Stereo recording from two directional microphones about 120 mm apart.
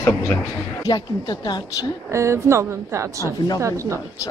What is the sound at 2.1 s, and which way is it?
A woman's voice, 25° right (ahead or behind).